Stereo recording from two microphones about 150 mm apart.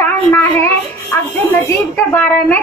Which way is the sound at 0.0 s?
15° left (ahead or behind).